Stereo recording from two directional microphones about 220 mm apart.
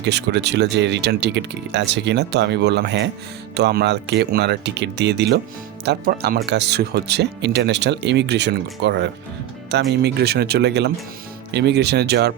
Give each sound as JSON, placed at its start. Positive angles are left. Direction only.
{"t": 0.0, "sound": "speech", "side_deg": -50}